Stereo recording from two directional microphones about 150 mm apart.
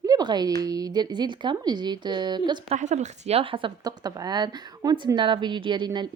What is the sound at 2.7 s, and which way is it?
A woman's voice, 50° right (ahead or behind).